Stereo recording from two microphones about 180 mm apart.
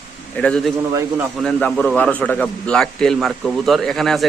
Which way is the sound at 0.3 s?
5° left (ahead or behind).